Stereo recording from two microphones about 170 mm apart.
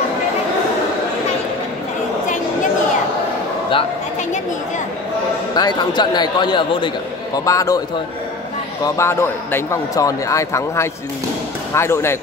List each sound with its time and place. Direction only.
5.5 s speech: 25° left (ahead or behind)
8.8 s a man's voice: 15° left (ahead or behind)